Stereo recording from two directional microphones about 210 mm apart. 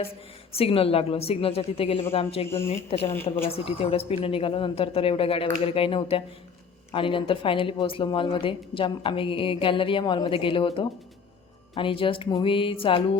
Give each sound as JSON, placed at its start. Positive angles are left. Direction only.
{"t": 0.5, "sound": "speech", "side_deg": 25}